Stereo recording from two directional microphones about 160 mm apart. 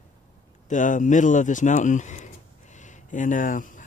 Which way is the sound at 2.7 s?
50° left (ahead or behind).